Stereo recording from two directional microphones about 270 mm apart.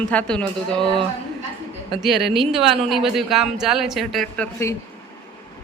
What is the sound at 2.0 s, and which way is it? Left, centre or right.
Speech, centre.